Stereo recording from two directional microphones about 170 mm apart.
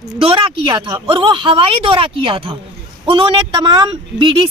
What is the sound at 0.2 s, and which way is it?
Speech, 30° right (ahead or behind).